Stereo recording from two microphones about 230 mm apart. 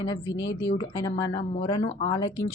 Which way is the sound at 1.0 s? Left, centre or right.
Centre.